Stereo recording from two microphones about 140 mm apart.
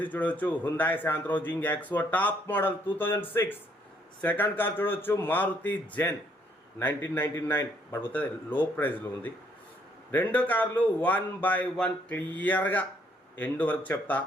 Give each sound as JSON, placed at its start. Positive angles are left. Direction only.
{"t": 0.0, "sound": "a man's voice", "side_deg": 10}